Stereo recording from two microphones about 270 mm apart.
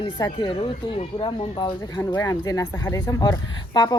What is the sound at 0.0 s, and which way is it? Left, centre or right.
A woman's voice, centre.